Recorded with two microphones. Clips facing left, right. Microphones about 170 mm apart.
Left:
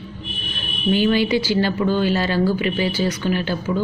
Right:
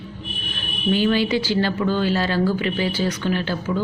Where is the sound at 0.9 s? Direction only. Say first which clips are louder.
Left 2 dB; 15° left (ahead or behind).